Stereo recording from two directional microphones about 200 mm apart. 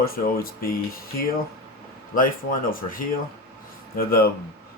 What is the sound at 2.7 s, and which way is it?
Speech, 45° left (ahead or behind).